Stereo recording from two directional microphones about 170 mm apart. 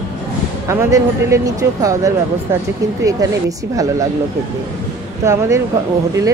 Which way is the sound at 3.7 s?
20° right (ahead or behind).